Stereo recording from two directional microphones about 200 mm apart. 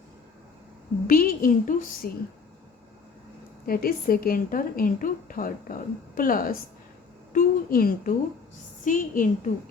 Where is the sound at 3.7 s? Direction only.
50° left (ahead or behind).